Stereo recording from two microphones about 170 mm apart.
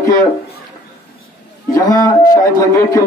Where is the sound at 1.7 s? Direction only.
20° left (ahead or behind).